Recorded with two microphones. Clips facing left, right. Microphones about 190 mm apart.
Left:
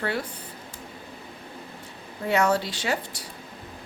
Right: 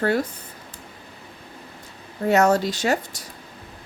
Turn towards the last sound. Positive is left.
turn(degrees=-45)  # may be behind; listen again after turning